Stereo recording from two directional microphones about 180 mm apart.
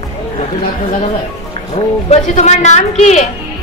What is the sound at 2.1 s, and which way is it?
Speech, 40° left (ahead or behind).